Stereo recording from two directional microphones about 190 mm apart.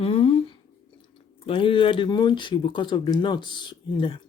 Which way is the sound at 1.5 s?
25° left (ahead or behind).